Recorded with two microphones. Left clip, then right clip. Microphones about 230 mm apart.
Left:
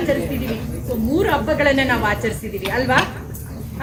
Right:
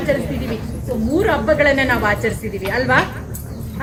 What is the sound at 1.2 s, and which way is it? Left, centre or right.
A woman's voice, centre.